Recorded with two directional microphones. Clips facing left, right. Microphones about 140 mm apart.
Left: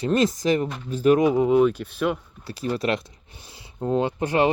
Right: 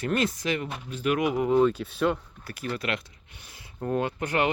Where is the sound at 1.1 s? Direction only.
25° left (ahead or behind).